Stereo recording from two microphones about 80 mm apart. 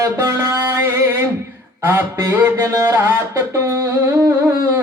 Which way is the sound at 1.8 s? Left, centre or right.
Right.